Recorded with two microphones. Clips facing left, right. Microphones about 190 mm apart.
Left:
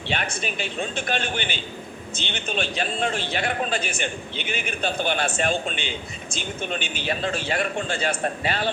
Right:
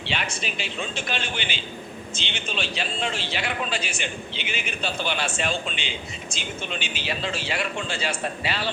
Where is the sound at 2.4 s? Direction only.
50° left (ahead or behind).